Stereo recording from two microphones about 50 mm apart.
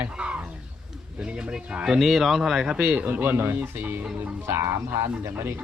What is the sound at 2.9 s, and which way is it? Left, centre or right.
Speech, right.